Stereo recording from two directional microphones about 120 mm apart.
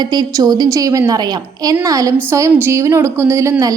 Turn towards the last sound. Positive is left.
turn(degrees=-25)  # may be behind; listen again after turning